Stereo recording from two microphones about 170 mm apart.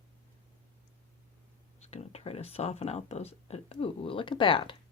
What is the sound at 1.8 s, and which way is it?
Speech, 40° left (ahead or behind).